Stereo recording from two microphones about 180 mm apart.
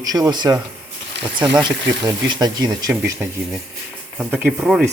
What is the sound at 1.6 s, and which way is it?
Speech, 25° right (ahead or behind).